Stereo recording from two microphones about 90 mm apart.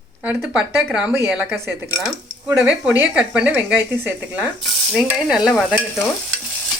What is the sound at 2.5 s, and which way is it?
Speech, 5° right (ahead or behind).